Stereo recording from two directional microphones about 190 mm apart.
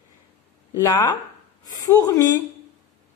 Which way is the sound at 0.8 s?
15° left (ahead or behind).